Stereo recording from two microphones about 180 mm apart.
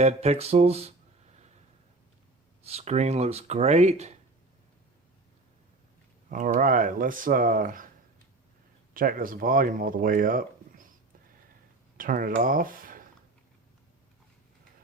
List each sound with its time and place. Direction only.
0.0 s speech: 35° right (ahead or behind)
2.6 s speech: 35° right (ahead or behind)
6.3 s speech: 50° right (ahead or behind)
8.9 s speech: 50° right (ahead or behind)
11.9 s speech: 50° right (ahead or behind)